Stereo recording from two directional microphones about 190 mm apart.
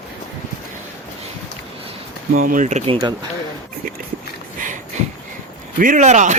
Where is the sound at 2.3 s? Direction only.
45° right (ahead or behind); by 3.2 s 25° right (ahead or behind).